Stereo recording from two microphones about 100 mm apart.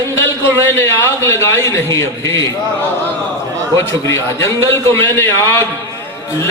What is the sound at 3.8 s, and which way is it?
A man's voice, 25° left (ahead or behind).